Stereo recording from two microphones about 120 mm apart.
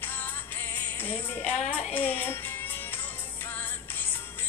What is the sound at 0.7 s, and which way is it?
Speech, 15° left (ahead or behind).